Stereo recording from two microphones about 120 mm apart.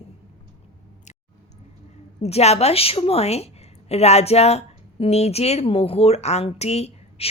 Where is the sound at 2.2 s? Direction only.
60° left (ahead or behind).